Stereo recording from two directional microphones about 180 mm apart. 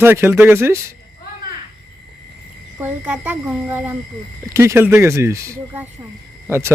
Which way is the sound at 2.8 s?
10° right (ahead or behind).